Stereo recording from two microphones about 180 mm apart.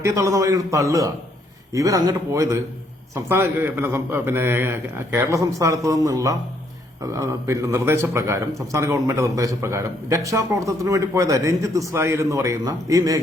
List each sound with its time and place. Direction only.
0.0 s a man's voice: 15° right (ahead or behind)